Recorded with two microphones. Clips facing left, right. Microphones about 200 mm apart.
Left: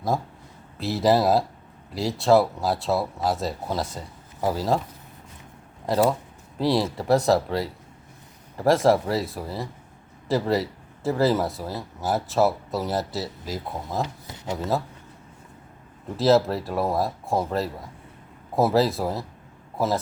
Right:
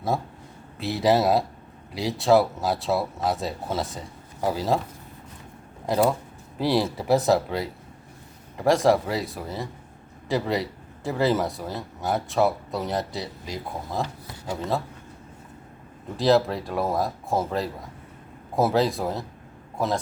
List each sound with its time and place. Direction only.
0.8 s speech: centre (ahead or behind)
5.8 s speech: centre (ahead or behind)
14.0 s speech: 20° left (ahead or behind)
16.1 s a man's voice: centre (ahead or behind)